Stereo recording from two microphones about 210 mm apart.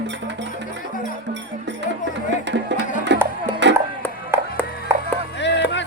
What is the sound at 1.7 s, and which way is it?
Music, 55° right (ahead or behind).